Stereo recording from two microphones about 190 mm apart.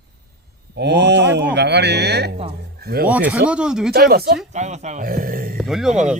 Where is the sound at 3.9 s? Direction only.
55° right (ahead or behind).